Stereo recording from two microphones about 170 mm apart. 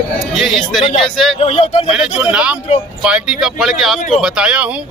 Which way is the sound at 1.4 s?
35° left (ahead or behind).